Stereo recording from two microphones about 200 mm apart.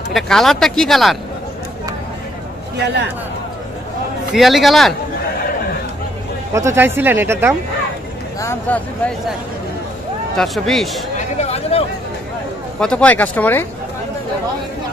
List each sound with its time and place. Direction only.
0.1 s speech: centre (ahead or behind)
4.3 s speech: centre (ahead or behind)
6.5 s speech: 15° right (ahead or behind)
8.4 s speech: 10° left (ahead or behind)
10.3 s speech: centre (ahead or behind)
11.1 s speech: 35° left (ahead or behind)
12.8 s speech: 5° left (ahead or behind)